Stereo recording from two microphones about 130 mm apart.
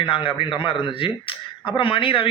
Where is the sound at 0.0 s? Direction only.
45° left (ahead or behind).